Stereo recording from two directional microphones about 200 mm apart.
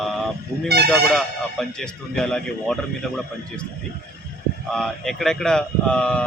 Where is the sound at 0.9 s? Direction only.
Centre (ahead or behind).